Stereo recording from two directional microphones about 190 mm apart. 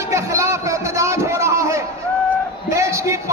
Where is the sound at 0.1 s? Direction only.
15° right (ahead or behind).